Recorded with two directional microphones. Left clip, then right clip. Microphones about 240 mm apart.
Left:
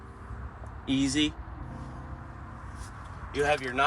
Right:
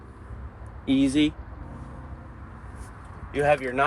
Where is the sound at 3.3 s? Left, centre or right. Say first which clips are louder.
Right 4 dB; right.